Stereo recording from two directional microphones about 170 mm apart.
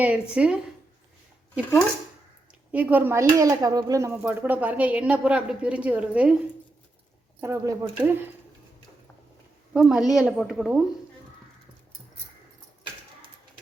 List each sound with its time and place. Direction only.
0.0 s speech: 5° right (ahead or behind)
2.7 s speech: 10° right (ahead or behind)
7.4 s speech: 15° right (ahead or behind)
9.7 s a woman's voice: 5° right (ahead or behind)